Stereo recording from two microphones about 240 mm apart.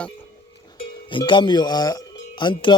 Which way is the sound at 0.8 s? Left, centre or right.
Centre.